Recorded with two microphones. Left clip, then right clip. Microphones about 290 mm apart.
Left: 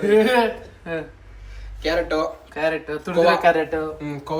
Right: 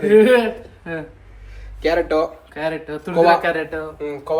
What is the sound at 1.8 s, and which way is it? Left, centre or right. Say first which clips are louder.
Speech: right 4 dB; right.